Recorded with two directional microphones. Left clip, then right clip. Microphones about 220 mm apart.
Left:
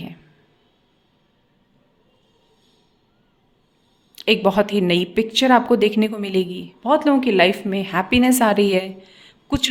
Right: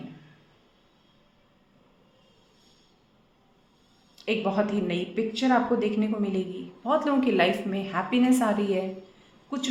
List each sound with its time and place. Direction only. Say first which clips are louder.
4.1 s a woman's voice: left 10 dB; 45° left (ahead or behind)